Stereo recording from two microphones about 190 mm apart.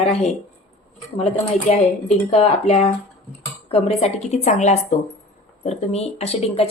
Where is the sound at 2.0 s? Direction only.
35° left (ahead or behind).